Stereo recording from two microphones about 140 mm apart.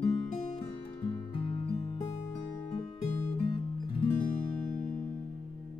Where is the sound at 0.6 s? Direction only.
30° left (ahead or behind).